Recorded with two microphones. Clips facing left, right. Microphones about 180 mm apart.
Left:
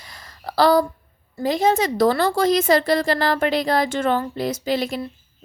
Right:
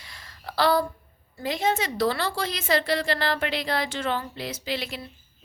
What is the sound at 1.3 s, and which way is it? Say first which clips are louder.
A woman's voice: left 7 dB; 40° left (ahead or behind).